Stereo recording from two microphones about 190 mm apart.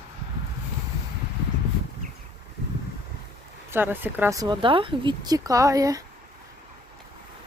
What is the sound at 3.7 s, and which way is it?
Speech, 10° right (ahead or behind).